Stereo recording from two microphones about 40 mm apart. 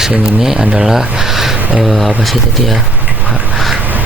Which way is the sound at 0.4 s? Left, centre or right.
Centre.